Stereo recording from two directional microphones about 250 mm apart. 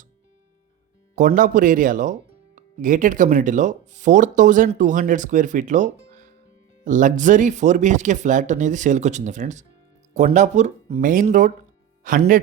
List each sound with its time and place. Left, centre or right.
1.1 s speech: right